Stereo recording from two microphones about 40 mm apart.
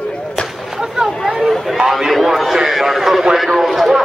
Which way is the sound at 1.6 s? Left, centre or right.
Centre.